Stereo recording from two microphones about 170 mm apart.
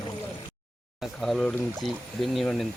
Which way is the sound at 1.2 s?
Centre (ahead or behind).